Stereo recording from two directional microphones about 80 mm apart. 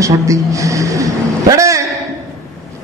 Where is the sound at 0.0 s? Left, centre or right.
Right.